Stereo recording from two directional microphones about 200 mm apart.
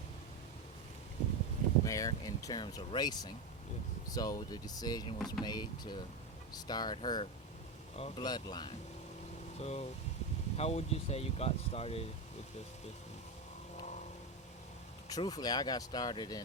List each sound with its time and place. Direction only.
1.8 s speech: 15° left (ahead or behind)
9.6 s speech: 30° left (ahead or behind)
15.1 s speech: 20° left (ahead or behind)